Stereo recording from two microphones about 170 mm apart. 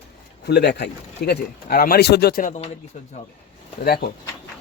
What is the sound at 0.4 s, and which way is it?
Speech, 75° left (ahead or behind).